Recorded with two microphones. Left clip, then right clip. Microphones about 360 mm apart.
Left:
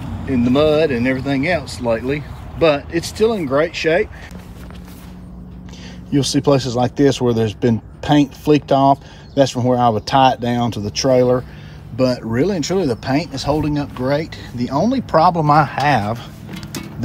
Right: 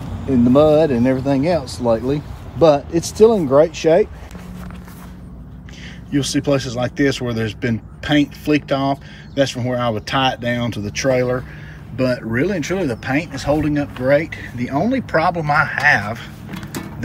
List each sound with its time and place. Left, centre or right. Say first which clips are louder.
0.5 s speech: right 2 dB; centre
2.9 s speech: right 1 dB; right
3.2 s speech: right 5 dB; centre
6.1 s speech: left 3 dB; centre